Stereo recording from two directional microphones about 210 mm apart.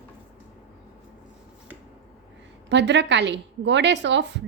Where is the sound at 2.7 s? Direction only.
55° right (ahead or behind).